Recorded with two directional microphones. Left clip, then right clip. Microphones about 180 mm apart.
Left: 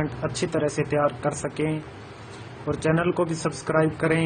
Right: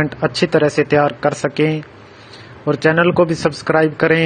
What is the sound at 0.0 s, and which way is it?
Speech, 35° right (ahead or behind).